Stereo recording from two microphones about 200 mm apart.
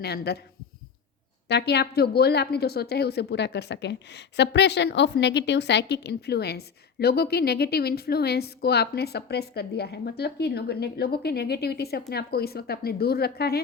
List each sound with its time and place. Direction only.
0.0 s a woman's voice: 55° left (ahead or behind)
1.5 s a woman's voice: 55° left (ahead or behind)